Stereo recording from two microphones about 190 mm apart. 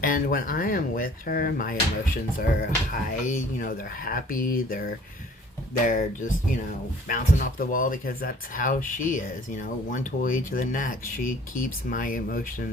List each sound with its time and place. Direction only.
0.0 s speech: 45° left (ahead or behind)
2.9 s speech: 45° left (ahead or behind)